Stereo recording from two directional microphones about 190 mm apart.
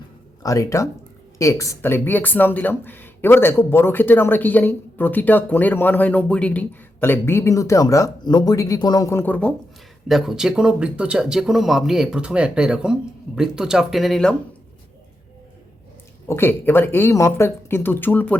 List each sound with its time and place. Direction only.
0.4 s speech: 15° left (ahead or behind)
10.1 s speech: centre (ahead or behind)
16.3 s speech: 10° left (ahead or behind)